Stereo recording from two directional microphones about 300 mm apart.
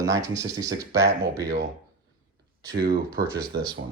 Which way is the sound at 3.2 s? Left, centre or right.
Centre.